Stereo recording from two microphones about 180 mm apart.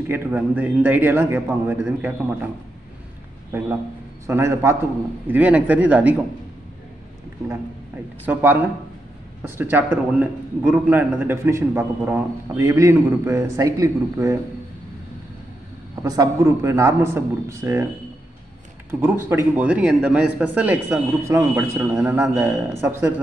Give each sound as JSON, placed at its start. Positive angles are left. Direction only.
{"t": 0.1, "sound": "a man's voice", "side_deg": -10}
{"t": 4.3, "sound": "a man's voice", "side_deg": -15}
{"t": 8.3, "sound": "a man's voice", "side_deg": -10}
{"t": 16.0, "sound": "a man's voice", "side_deg": -20}
{"t": 18.9, "sound": "a man's voice", "side_deg": -10}